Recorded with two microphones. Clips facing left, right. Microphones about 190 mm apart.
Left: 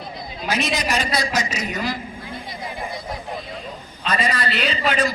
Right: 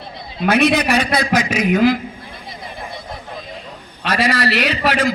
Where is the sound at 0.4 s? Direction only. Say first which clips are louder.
Right 9 dB; 60° right (ahead or behind).